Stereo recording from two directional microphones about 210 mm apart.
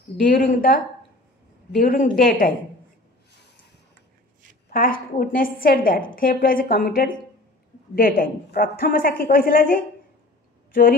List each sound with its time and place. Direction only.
0.2 s a woman's voice: 40° left (ahead or behind)
1.8 s a woman's voice: 40° left (ahead or behind)
4.6 s a woman's voice: 40° left (ahead or behind)